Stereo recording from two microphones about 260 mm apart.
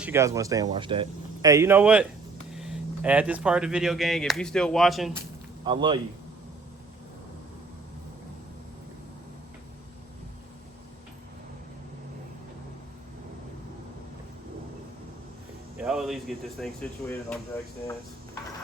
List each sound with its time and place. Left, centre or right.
0.0 s speech: centre
5.6 s speech: centre
15.8 s speech: centre